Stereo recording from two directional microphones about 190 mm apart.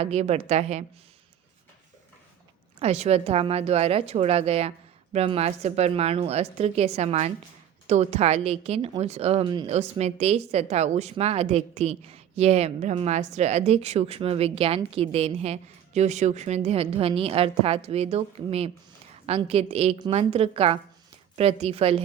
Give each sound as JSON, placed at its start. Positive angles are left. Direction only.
{"t": 0.0, "sound": "speech", "side_deg": -35}
{"t": 2.7, "sound": "speech", "side_deg": -35}
{"t": 9.7, "sound": "speech", "side_deg": -35}